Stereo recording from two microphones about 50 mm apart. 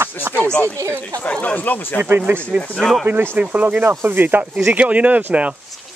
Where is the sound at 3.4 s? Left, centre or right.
Right.